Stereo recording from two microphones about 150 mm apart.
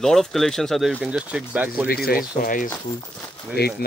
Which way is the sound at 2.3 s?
65° left (ahead or behind).